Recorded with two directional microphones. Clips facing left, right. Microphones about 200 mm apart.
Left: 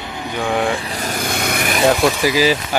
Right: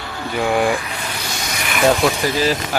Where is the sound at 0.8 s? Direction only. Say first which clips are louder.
Left 4 dB; 35° left (ahead or behind); by 1.7 s 55° left (ahead or behind).